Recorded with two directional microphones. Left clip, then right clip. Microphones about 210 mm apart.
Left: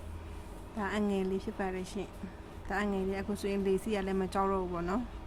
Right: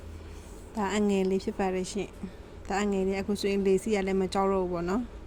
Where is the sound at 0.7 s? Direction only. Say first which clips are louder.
Right 6 dB; 20° right (ahead or behind).